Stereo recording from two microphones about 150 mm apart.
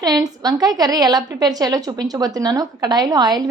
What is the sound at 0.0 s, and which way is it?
A woman's voice, 25° right (ahead or behind).